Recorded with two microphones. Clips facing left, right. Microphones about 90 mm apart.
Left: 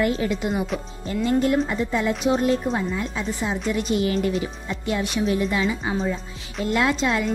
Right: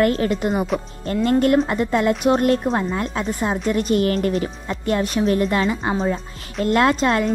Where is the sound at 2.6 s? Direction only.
45° right (ahead or behind).